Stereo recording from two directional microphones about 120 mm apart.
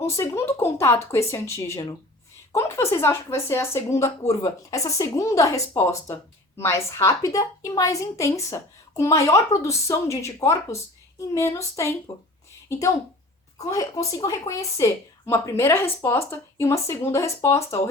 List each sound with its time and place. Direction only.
0.0 s a woman's voice: 25° left (ahead or behind)
13.7 s a woman's voice: 30° left (ahead or behind)